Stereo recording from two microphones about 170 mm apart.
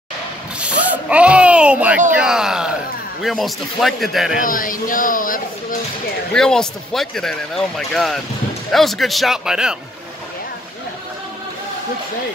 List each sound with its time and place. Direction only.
0.6 s a sound: 10° right (ahead or behind)
2.1 s speech: 5° right (ahead or behind)
4.4 s speech: 55° left (ahead or behind)
6.3 s speech: 5° left (ahead or behind)